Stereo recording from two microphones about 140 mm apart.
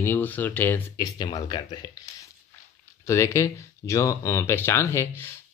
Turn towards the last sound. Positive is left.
turn(degrees=15)  # may be behind; listen again after turning